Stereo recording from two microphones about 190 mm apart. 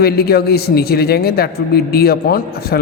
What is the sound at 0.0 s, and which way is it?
Speech, 55° left (ahead or behind).